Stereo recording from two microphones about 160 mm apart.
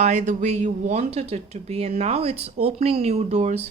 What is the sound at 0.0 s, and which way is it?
Speech, 50° right (ahead or behind).